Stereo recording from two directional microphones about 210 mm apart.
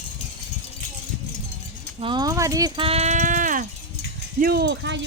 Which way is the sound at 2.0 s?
20° right (ahead or behind).